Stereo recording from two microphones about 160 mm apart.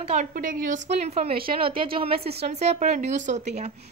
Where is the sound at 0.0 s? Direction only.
45° right (ahead or behind).